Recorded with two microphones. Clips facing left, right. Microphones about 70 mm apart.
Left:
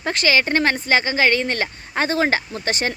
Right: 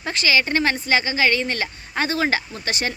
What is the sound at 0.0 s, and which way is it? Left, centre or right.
Speech, left.